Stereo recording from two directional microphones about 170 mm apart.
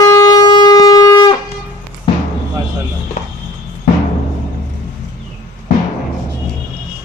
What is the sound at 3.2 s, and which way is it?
Music, 45° left (ahead or behind).